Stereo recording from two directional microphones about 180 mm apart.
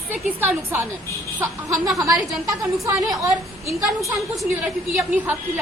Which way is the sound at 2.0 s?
Centre (ahead or behind).